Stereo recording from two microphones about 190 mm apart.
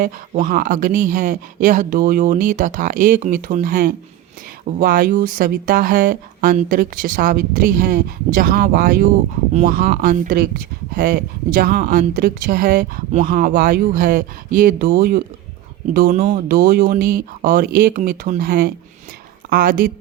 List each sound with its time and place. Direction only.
0.0 s speech: 45° right (ahead or behind)